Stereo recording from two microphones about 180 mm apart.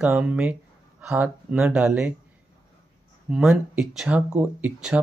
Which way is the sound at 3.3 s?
5° right (ahead or behind).